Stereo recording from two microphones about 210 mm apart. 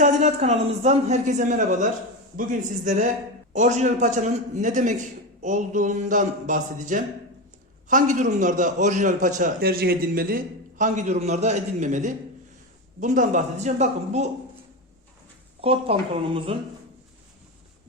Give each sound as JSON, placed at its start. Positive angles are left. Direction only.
{"t": 0.0, "sound": "a man's voice", "side_deg": -35}
{"t": 15.6, "sound": "speech", "side_deg": -30}